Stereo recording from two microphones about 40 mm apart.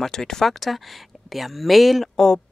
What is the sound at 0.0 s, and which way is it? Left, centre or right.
Speech, centre.